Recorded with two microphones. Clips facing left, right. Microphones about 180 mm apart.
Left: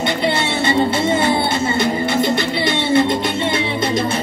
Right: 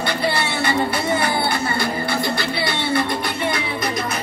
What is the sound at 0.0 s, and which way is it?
Music, 20° left (ahead or behind).